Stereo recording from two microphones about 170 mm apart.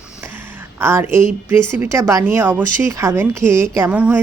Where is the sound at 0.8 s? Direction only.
15° right (ahead or behind).